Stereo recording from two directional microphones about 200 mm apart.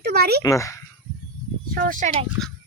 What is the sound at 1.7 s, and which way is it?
Speech, 45° right (ahead or behind).